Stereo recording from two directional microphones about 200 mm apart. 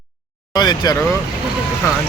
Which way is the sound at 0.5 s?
20° left (ahead or behind).